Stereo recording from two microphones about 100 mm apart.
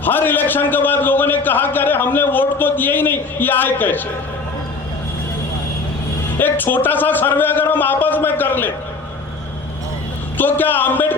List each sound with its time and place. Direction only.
0.0 s a sound: 20° left (ahead or behind)
6.4 s a man's voice: 20° left (ahead or behind)
10.3 s speech: 20° left (ahead or behind)